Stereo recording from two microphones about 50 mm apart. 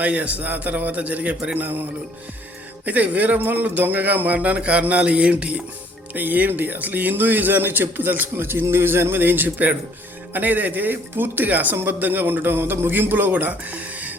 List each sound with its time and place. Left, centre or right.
0.0 s a man's voice: right
1.5 s speech: right
6.1 s speech: right